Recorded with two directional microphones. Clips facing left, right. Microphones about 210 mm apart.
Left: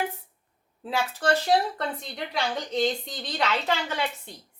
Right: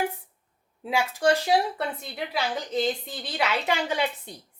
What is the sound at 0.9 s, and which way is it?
A woman's voice, 15° right (ahead or behind).